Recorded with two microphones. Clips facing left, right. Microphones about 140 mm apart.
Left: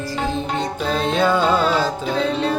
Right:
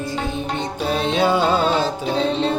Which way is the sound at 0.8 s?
15° right (ahead or behind).